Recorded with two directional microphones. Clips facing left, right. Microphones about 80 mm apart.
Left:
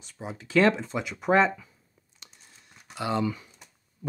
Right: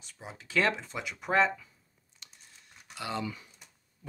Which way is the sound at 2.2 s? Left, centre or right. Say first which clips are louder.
Left 2 dB; centre.